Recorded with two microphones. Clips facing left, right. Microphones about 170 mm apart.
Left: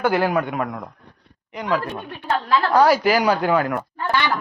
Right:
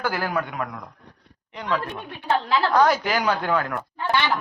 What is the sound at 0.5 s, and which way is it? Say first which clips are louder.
Speech: left 5 dB; 40° left (ahead or behind).